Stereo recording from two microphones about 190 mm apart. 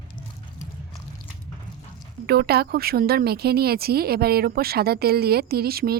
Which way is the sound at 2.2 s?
55° right (ahead or behind).